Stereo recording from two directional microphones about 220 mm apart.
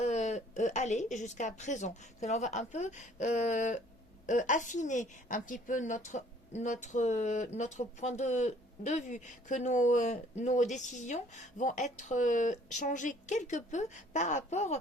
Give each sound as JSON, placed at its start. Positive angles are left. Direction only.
{"t": 0.0, "sound": "a woman's voice", "side_deg": 30}